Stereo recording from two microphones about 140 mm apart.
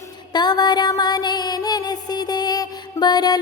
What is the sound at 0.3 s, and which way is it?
Music, 30° left (ahead or behind).